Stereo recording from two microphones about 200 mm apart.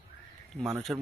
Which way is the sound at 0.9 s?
5° right (ahead or behind).